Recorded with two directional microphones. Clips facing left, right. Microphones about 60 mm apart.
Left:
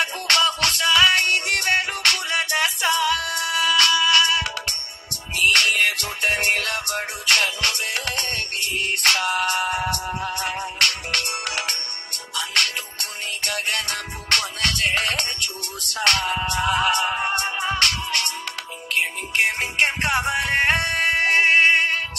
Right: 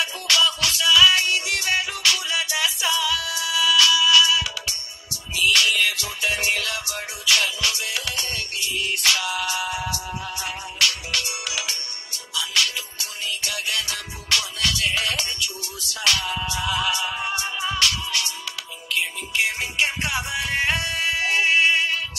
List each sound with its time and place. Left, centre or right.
0.0 s music: left